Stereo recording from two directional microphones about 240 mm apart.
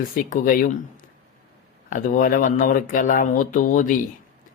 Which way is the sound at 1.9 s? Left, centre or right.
Left.